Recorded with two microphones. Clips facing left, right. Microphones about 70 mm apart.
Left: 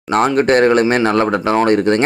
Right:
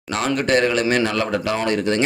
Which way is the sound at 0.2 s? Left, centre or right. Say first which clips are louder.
Left 6 dB; left.